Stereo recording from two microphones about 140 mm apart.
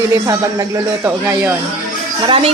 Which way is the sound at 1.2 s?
10° right (ahead or behind).